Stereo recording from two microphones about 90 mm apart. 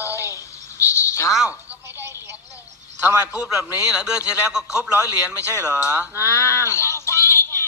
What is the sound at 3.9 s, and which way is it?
A man's voice, 10° right (ahead or behind).